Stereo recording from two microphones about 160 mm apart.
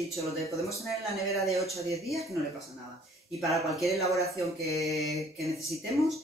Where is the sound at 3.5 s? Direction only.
Centre (ahead or behind).